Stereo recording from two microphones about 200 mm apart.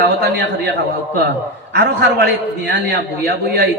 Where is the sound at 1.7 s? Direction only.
55° right (ahead or behind).